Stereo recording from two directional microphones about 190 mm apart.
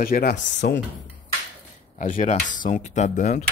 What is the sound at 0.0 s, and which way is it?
Speech, 55° left (ahead or behind).